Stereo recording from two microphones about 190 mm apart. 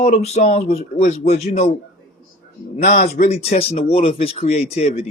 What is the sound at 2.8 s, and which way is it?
Speech, 40° left (ahead or behind).